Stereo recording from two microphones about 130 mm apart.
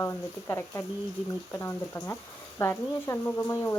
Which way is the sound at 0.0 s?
20° left (ahead or behind).